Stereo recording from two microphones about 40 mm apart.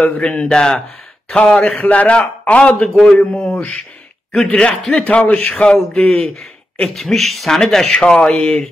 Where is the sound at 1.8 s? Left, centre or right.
Left.